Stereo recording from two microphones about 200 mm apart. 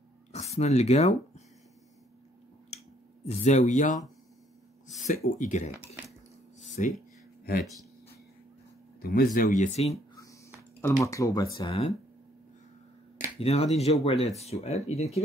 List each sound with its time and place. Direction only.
0.3 s speech: 35° left (ahead or behind)
3.3 s speech: 35° left (ahead or behind)
6.8 s speech: 35° left (ahead or behind)
9.0 s speech: 50° left (ahead or behind); by 9.9 s 30° left (ahead or behind)
10.8 s speech: 15° left (ahead or behind)
13.4 s speech: 30° left (ahead or behind)